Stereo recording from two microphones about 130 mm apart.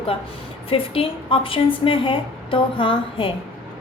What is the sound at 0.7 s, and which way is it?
A woman's voice, 45° left (ahead or behind).